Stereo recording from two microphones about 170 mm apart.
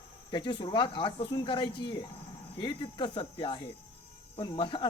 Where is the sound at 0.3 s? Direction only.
25° left (ahead or behind).